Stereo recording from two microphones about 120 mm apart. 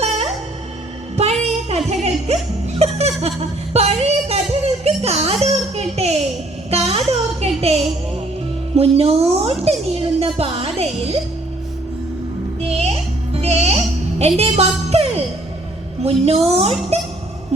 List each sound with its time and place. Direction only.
0.0 s music: 65° right (ahead or behind)
1.1 s a sound: 65° right (ahead or behind)
1.9 s music: 65° right (ahead or behind)
6.7 s a sound: 60° right (ahead or behind)
8.7 s a woman's voice: 55° right (ahead or behind)
12.5 s music: 60° right (ahead or behind)
14.2 s a woman's voice: 60° right (ahead or behind)